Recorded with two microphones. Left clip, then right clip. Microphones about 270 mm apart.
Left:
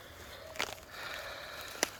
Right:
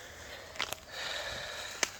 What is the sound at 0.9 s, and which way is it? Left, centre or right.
Sniff, centre.